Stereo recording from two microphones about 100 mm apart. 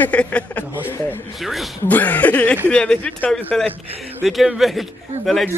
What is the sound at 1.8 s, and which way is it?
Speech, 15° left (ahead or behind).